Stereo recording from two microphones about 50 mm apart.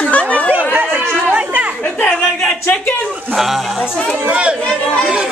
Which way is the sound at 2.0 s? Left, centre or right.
Left.